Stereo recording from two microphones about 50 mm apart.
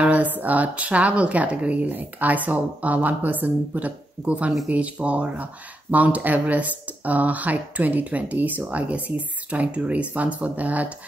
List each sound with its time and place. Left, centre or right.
0.0 s speech: right